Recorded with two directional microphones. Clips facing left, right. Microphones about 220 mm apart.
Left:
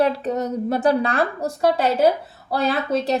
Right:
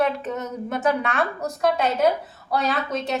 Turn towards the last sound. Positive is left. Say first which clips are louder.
# left 4 dB
turn(degrees=35)  # may be behind; listen again after turning